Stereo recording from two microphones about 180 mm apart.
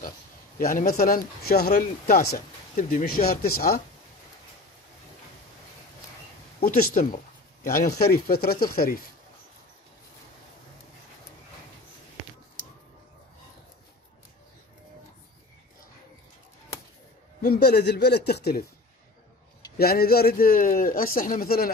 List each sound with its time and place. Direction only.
0.6 s speech: 55° left (ahead or behind)
6.6 s speech: 55° left (ahead or behind)
17.4 s speech: 60° left (ahead or behind)
19.8 s speech: 60° left (ahead or behind)